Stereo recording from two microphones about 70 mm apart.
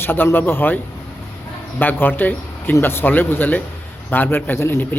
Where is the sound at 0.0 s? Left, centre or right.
Left.